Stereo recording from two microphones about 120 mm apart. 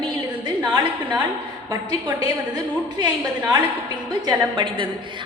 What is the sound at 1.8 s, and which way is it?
A woman's voice, 40° right (ahead or behind).